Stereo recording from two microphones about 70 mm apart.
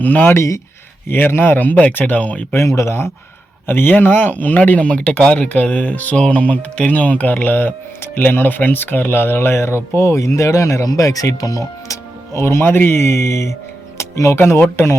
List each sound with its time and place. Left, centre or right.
0.0 s speech: left
0.3 s speech: left
1.0 s speech: left
2.5 s speech: left
12.3 s speech: left
14.3 s speech: left